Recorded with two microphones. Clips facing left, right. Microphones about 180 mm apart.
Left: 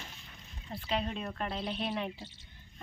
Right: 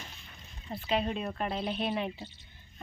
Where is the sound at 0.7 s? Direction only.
5° right (ahead or behind).